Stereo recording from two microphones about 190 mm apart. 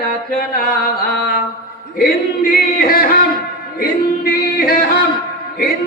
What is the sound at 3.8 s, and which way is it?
Singing, 50° left (ahead or behind).